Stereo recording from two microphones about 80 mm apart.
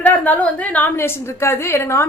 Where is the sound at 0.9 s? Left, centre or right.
Left.